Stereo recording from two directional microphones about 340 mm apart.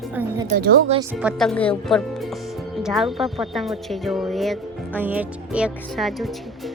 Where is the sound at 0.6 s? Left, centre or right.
Right.